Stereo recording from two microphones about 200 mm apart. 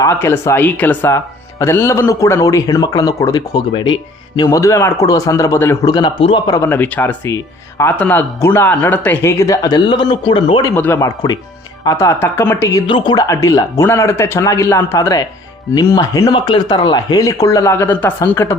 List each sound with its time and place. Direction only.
0.0 s a man's voice: 15° left (ahead or behind)
10.8 s a man's voice: 10° left (ahead or behind)